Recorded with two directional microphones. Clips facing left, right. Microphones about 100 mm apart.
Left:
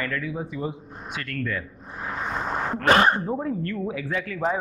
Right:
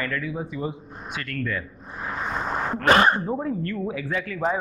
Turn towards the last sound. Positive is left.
turn(degrees=-20)  # may be behind; listen again after turning